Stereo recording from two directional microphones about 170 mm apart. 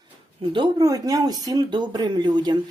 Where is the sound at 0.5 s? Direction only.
25° right (ahead or behind).